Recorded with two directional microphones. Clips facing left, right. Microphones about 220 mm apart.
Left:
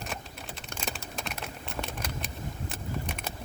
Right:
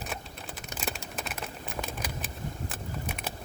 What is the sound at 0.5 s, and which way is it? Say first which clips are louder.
Typing: right 2 dB; 5° right (ahead or behind).